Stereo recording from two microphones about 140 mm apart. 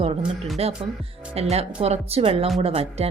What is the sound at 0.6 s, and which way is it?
Speech, 45° right (ahead or behind).